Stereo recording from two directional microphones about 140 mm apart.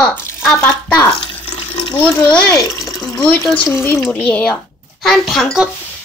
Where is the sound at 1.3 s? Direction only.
40° left (ahead or behind).